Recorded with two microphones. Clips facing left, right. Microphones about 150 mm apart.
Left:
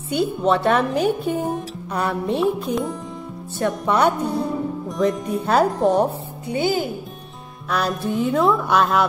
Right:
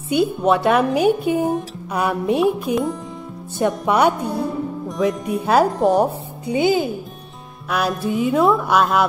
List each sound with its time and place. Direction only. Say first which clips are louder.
0.1 s speech: right 2 dB; 10° right (ahead or behind)
3.5 s speech: right 2 dB; 15° right (ahead or behind)
4.8 s music: right 1 dB; centre (ahead or behind)
6.4 s speech: right 4 dB; 15° right (ahead or behind)
7.7 s music: right 1 dB; 5° right (ahead or behind)